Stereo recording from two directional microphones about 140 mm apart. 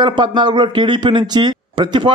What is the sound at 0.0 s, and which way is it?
Speech, 35° right (ahead or behind).